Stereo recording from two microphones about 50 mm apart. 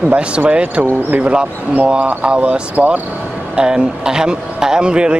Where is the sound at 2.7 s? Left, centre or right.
Right.